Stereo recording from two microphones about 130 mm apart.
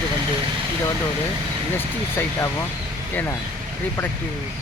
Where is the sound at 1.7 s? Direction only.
15° left (ahead or behind).